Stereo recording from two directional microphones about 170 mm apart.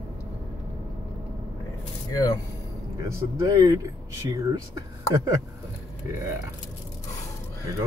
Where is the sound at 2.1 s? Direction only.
20° left (ahead or behind).